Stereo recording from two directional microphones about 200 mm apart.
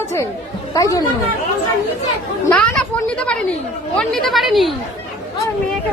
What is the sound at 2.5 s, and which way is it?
A woman's voice, 5° left (ahead or behind).